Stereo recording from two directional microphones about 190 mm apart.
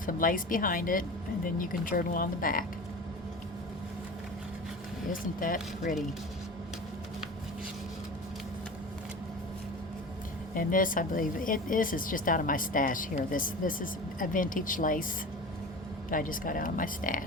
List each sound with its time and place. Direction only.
0.0 s speech: 45° left (ahead or behind)
5.1 s speech: 45° left (ahead or behind)
10.5 s speech: 45° left (ahead or behind)
16.0 s speech: 45° left (ahead or behind)